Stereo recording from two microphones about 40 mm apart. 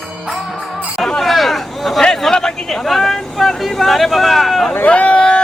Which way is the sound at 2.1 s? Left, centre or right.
Centre.